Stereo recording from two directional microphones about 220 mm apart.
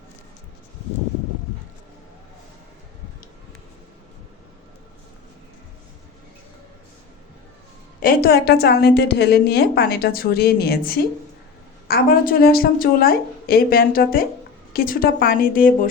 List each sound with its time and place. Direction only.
8.0 s a woman's voice: 45° left (ahead or behind)